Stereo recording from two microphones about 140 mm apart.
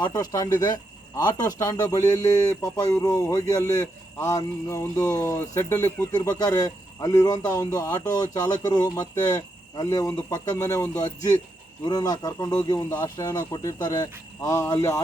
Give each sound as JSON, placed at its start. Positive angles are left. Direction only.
{"t": 0.0, "sound": "speech", "side_deg": 30}